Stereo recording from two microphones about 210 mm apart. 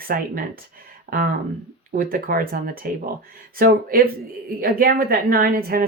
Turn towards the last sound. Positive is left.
turn(degrees=-45)  # may be behind; listen again after turning